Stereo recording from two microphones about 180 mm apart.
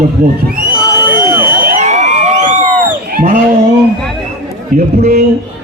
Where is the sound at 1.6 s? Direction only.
40° right (ahead or behind).